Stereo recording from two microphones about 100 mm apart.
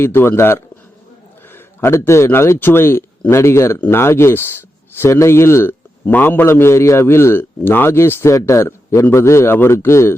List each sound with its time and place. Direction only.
0.0 s a man's voice: 25° left (ahead or behind)